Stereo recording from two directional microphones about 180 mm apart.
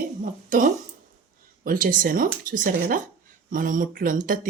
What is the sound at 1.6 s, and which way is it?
Speech, 50° right (ahead or behind).